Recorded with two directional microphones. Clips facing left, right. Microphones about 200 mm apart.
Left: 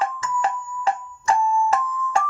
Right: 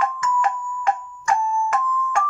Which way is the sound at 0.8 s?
30° left (ahead or behind).